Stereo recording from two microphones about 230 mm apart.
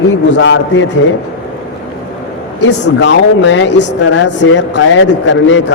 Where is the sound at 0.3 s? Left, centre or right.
Left.